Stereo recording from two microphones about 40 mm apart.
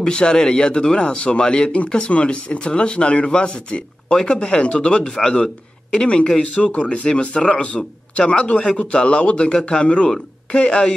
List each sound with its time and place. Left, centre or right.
0.0 s speech: centre
10.0 s speech: centre